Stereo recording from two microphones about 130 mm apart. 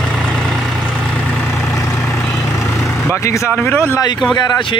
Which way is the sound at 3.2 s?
25° left (ahead or behind).